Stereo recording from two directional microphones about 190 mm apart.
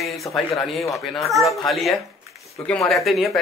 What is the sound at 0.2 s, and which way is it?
Speech, 15° left (ahead or behind).